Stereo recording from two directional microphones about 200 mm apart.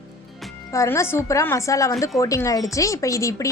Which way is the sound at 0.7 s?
15° left (ahead or behind).